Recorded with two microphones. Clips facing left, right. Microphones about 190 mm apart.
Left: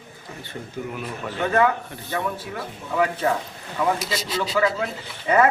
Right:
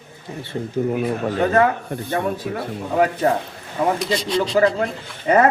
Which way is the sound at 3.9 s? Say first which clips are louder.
Right 6 dB; 5° left (ahead or behind).